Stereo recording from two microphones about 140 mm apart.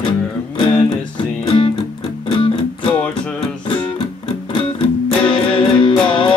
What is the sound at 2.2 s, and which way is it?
Music, 40° left (ahead or behind).